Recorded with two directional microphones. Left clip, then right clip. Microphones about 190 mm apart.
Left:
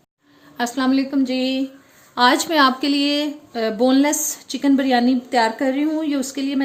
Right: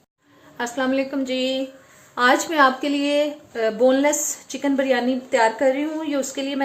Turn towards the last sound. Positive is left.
turn(degrees=60)  # may be behind; listen again after turning